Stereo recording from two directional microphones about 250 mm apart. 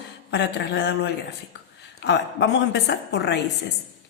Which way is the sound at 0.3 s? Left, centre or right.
Left.